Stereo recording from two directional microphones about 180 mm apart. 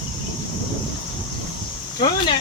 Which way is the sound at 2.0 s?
25° left (ahead or behind).